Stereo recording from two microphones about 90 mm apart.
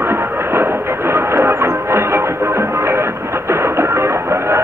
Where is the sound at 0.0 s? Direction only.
25° right (ahead or behind).